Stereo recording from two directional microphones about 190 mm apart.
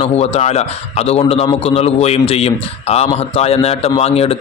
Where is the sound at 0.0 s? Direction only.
35° left (ahead or behind).